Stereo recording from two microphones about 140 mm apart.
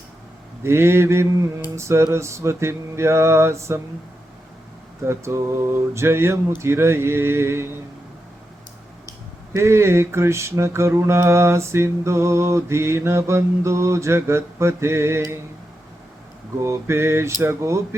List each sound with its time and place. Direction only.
0.6 s mantra: 20° right (ahead or behind)
5.0 s mantra: 20° right (ahead or behind)
6.6 s speech: 20° right (ahead or behind)
9.5 s mantra: 20° right (ahead or behind)
16.6 s mantra: 20° right (ahead or behind)